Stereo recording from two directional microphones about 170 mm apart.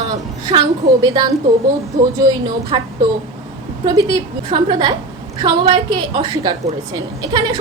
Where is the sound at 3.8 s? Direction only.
25° right (ahead or behind).